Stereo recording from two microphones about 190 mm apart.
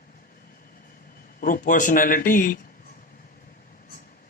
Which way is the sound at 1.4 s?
45° left (ahead or behind).